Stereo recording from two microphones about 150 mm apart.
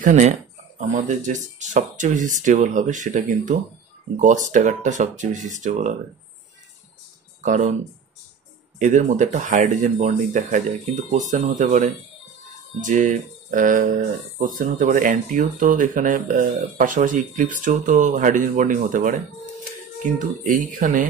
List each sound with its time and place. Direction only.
0.0 s speech: 55° right (ahead or behind)
7.4 s speech: 55° right (ahead or behind)
8.7 s speech: 55° right (ahead or behind)